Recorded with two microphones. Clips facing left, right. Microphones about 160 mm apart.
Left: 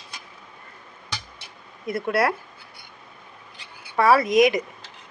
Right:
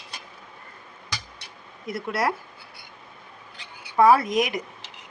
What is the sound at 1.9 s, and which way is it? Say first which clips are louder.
Speech: left 4 dB; 55° left (ahead or behind).